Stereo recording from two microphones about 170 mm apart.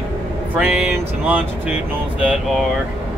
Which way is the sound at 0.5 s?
5° right (ahead or behind).